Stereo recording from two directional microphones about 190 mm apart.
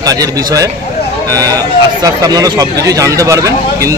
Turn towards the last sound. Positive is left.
turn(degrees=-15)  # may be behind; listen again after turning